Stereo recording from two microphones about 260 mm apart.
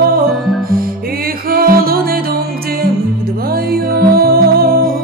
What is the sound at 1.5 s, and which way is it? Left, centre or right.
Music, right.